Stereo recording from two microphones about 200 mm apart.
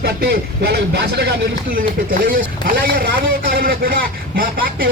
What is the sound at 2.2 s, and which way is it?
A man's voice, 45° right (ahead or behind).